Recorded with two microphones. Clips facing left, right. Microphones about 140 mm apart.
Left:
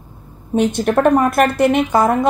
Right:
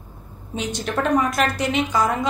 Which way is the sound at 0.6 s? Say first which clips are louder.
Left 10 dB; 55° left (ahead or behind).